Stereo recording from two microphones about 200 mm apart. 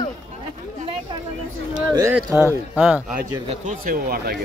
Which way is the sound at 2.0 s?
15° right (ahead or behind).